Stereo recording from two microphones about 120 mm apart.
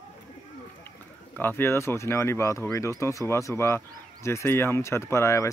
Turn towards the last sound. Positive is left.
turn(degrees=25)  # may be behind; listen again after turning